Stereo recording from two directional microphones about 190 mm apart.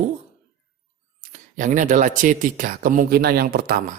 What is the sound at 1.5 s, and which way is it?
Speech, 40° right (ahead or behind).